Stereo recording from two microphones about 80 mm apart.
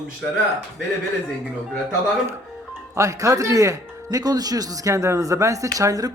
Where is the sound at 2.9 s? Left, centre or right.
Right.